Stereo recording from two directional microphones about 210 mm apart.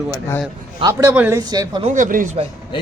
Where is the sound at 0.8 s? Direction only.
15° right (ahead or behind).